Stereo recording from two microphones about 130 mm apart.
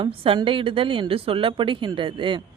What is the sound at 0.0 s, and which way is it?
Speech, 45° right (ahead or behind).